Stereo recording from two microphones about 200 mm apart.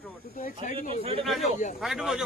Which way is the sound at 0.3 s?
40° left (ahead or behind).